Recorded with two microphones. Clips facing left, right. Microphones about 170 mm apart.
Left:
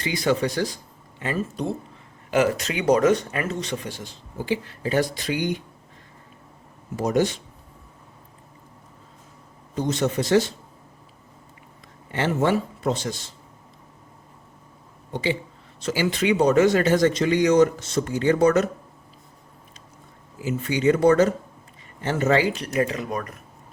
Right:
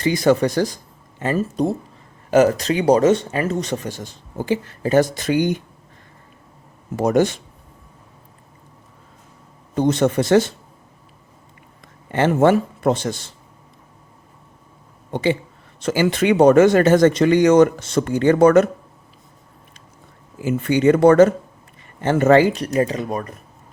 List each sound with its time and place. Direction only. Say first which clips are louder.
0.0 s speech: right 6 dB; 45° right (ahead or behind); by 3.5 s 30° right (ahead or behind)
3.5 s speech: right 6 dB; 45° right (ahead or behind)
6.9 s speech: right 5 dB; 50° right (ahead or behind)
9.7 s speech: right 6 dB; 55° right (ahead or behind)
12.1 s speech: right 7 dB; 50° right (ahead or behind)
15.1 s speech: right 6 dB; 50° right (ahead or behind)
20.4 s speech: right 6 dB; 55° right (ahead or behind); by 23.7 s 30° right (ahead or behind)